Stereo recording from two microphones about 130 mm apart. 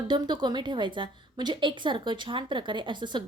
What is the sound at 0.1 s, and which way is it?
A woman's voice, 35° right (ahead or behind).